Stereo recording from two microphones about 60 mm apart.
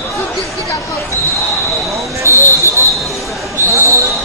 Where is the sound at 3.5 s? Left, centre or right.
Right.